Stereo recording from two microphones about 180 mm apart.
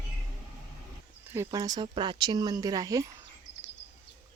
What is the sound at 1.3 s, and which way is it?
Speech, 15° right (ahead or behind).